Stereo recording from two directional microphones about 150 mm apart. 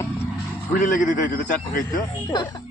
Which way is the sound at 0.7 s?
60° left (ahead or behind).